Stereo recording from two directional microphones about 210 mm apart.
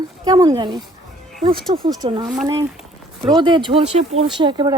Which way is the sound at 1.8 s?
20° right (ahead or behind).